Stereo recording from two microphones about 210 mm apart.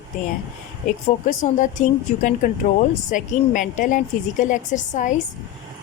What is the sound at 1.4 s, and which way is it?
Speech, 35° left (ahead or behind).